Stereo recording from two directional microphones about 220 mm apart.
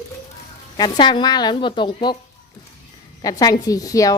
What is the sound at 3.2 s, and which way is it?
Speech, 15° left (ahead or behind).